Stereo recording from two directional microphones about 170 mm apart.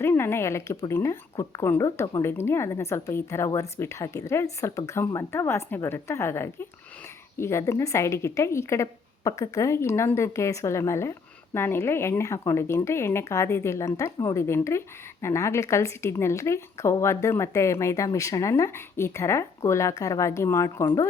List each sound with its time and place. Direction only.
0.0 s a woman's voice: 15° left (ahead or behind)